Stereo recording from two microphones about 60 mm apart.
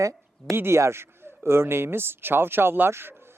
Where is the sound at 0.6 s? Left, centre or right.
Right.